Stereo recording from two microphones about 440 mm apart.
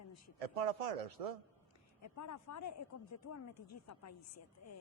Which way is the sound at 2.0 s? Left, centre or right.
Left.